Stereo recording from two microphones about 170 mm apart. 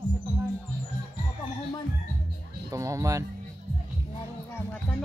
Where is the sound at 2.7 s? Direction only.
20° right (ahead or behind).